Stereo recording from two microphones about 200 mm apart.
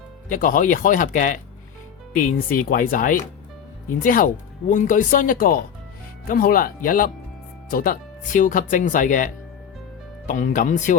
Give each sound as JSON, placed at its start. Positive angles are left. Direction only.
{"t": 0.3, "sound": "speech", "side_deg": 45}